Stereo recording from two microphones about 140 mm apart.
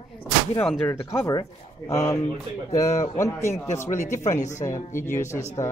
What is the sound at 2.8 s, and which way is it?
Speech, 50° left (ahead or behind).